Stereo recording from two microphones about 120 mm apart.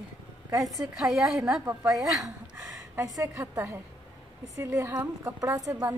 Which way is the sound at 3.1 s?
25° right (ahead or behind).